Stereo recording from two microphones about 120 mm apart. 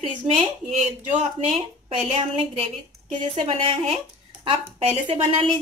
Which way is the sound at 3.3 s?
50° right (ahead or behind).